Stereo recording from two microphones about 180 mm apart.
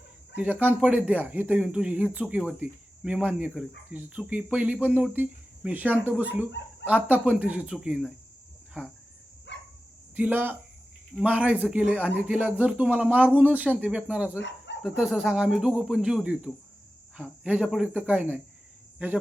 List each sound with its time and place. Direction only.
0.3 s speech: 10° right (ahead or behind)
9.5 s dog: 75° left (ahead or behind)
10.2 s speech: 10° right (ahead or behind)